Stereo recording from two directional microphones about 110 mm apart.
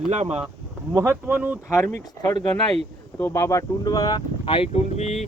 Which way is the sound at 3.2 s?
20° left (ahead or behind).